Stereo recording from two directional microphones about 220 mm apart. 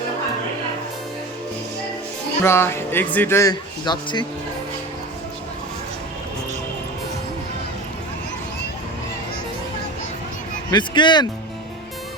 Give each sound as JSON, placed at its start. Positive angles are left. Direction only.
{"t": 2.4, "sound": "speech", "side_deg": 10}
{"t": 10.7, "sound": "speech", "side_deg": 20}